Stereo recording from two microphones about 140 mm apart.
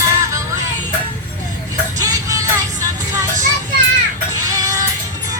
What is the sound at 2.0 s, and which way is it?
Music, 25° right (ahead or behind).